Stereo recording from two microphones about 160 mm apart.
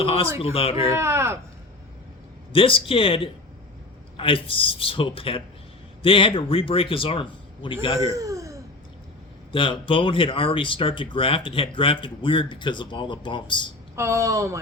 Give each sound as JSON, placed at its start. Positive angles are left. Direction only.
{"t": 0.0, "sound": "speech", "side_deg": 35}
{"t": 0.9, "sound": "speech", "side_deg": -15}
{"t": 2.5, "sound": "speech", "side_deg": 35}
{"t": 7.9, "sound": "a sound", "side_deg": -20}
{"t": 9.5, "sound": "speech", "side_deg": 35}
{"t": 13.9, "sound": "speech", "side_deg": -15}